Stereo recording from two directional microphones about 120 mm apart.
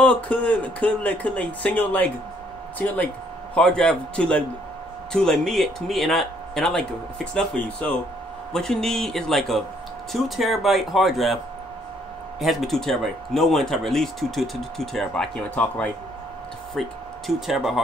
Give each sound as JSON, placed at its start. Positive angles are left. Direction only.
{"t": 0.0, "sound": "speech", "side_deg": 10}
{"t": 3.5, "sound": "speech", "side_deg": 5}
{"t": 12.4, "sound": "speech", "side_deg": 0}